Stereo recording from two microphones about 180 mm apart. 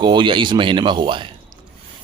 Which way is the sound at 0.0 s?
25° right (ahead or behind).